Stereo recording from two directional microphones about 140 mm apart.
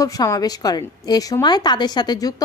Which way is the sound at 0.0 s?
25° left (ahead or behind).